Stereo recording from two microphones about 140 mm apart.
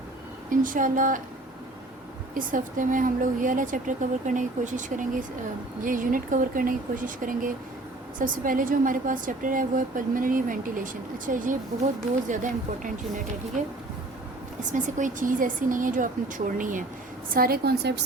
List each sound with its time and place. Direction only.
0.5 s speech: 75° right (ahead or behind)
2.3 s speech: 75° right (ahead or behind)
14.7 s speech: 65° right (ahead or behind)
17.3 s a woman's voice: 90° right